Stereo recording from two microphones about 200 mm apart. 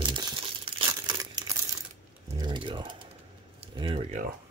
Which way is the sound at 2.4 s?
25° right (ahead or behind).